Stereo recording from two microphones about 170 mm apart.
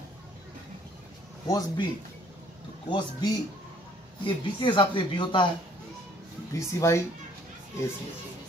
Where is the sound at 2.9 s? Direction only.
25° left (ahead or behind).